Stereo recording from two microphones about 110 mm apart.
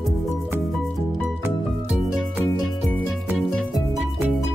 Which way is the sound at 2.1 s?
5° right (ahead or behind).